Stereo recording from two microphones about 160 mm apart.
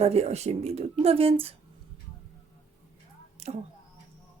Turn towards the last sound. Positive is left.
turn(degrees=-40)  # may be behind; listen again after turning